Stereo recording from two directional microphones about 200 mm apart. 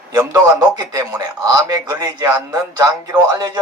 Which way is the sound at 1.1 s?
20° right (ahead or behind).